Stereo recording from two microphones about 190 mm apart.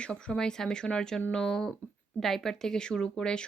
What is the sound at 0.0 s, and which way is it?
Speech, 5° left (ahead or behind).